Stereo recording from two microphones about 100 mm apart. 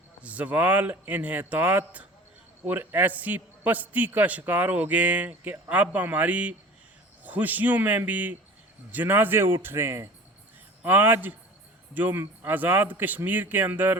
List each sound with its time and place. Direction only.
0.2 s a man's voice: 15° right (ahead or behind)